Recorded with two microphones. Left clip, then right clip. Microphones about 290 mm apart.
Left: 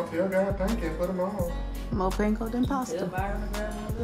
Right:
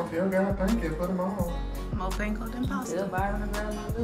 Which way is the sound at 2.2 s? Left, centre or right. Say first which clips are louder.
Left 5 dB; centre.